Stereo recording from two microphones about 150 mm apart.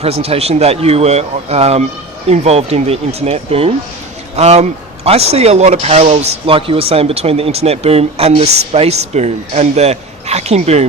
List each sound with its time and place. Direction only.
0.0 s speech: 40° right (ahead or behind)